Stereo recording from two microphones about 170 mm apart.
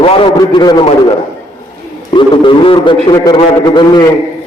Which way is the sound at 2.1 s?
30° left (ahead or behind).